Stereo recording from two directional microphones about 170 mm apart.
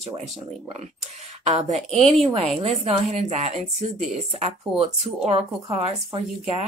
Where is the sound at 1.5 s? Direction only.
40° right (ahead or behind).